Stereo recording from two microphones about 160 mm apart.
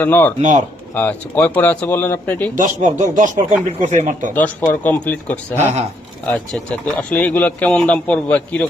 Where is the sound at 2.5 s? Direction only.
55° right (ahead or behind).